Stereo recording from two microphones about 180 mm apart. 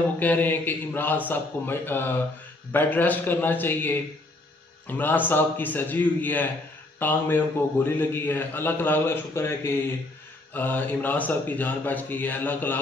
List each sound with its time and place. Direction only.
0.2 s a man's voice: 10° left (ahead or behind)